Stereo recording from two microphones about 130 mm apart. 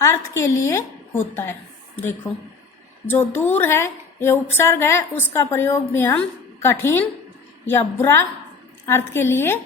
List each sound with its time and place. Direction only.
0.0 s a woman's voice: 20° left (ahead or behind)